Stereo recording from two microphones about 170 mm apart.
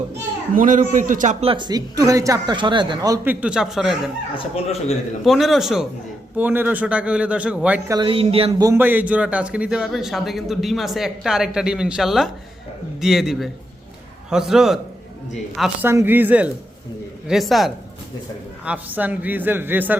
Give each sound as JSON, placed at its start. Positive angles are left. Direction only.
{"t": 0.5, "sound": "a man's voice", "side_deg": -50}
{"t": 3.2, "sound": "a man's voice", "side_deg": -5}
{"t": 4.4, "sound": "a man's voice", "side_deg": 35}
{"t": 5.2, "sound": "a man's voice", "side_deg": 0}
{"t": 7.9, "sound": "speech", "side_deg": -25}
{"t": 8.6, "sound": "a man's voice", "side_deg": -15}
{"t": 15.9, "sound": "a man's voice", "side_deg": -15}